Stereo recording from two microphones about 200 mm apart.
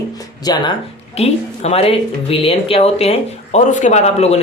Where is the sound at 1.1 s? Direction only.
30° left (ahead or behind).